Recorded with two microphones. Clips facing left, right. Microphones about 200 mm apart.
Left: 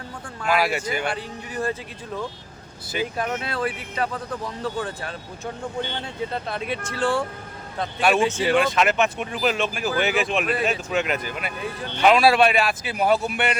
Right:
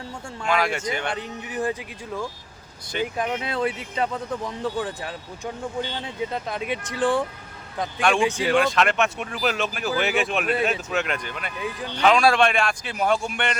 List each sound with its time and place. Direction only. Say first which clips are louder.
0.4 s speech: left 1 dB; 5° left (ahead or behind)
1.1 s speech: right 1 dB; 15° right (ahead or behind)
3.2 s speech: right 1 dB; 15° right (ahead or behind)
8.4 s speech: even; centre (ahead or behind)